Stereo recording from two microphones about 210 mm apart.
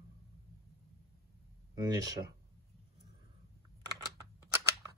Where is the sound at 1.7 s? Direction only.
20° right (ahead or behind).